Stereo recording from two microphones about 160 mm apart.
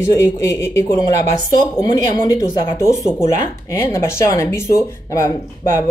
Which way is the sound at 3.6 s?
20° left (ahead or behind).